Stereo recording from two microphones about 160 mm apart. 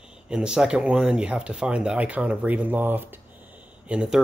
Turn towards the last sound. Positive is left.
turn(degrees=-5)  # may be behind; listen again after turning